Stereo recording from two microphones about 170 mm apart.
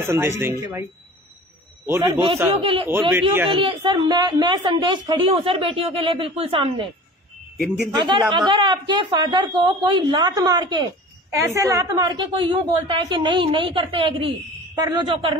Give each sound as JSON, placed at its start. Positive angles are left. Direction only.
{"t": 0.0, "sound": "speech", "side_deg": -15}
{"t": 1.9, "sound": "speech", "side_deg": -15}
{"t": 2.5, "sound": "a woman's voice", "side_deg": -35}
{"t": 2.9, "sound": "speech", "side_deg": -10}
{"t": 3.4, "sound": "a woman's voice", "side_deg": -30}
{"t": 7.9, "sound": "a woman's voice", "side_deg": -25}